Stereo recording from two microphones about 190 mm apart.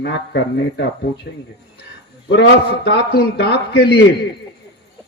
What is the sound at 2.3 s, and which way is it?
Speech, 60° left (ahead or behind).